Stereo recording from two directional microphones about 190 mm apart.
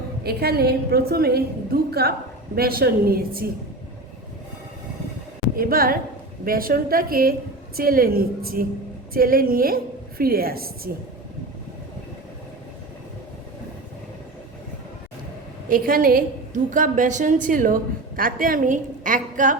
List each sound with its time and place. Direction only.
0.2 s a woman's voice: 55° right (ahead or behind)
5.5 s a woman's voice: 50° right (ahead or behind)
15.7 s a woman's voice: 50° right (ahead or behind)